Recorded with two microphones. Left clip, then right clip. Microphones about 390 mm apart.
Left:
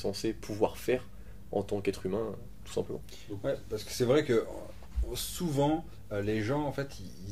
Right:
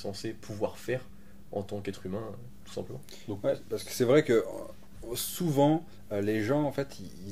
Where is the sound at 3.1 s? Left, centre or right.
Centre.